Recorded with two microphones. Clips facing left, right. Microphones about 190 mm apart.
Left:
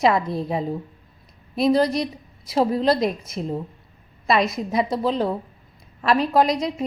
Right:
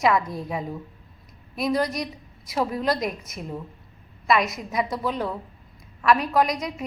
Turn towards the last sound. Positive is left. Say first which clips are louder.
# left 4 dB
turn(degrees=30)  # may be behind; listen again after turning